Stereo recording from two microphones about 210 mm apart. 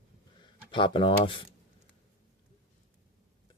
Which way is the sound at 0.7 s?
25° left (ahead or behind).